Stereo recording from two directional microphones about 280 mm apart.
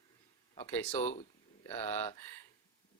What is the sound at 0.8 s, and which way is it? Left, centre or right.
Speech, centre.